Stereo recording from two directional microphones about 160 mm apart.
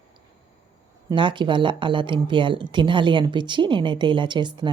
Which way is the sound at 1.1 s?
30° right (ahead or behind).